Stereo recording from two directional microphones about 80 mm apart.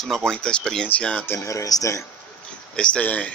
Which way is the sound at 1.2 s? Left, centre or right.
Left.